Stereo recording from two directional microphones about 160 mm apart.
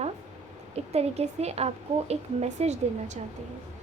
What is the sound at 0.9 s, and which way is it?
A woman's voice, 40° right (ahead or behind).